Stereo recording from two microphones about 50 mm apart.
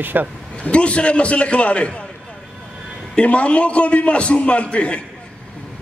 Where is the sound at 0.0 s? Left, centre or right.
Right.